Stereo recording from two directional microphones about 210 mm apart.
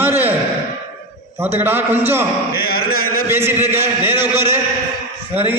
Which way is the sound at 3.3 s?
10° right (ahead or behind).